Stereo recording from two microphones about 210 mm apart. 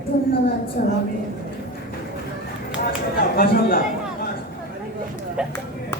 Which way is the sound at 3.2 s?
45° left (ahead or behind).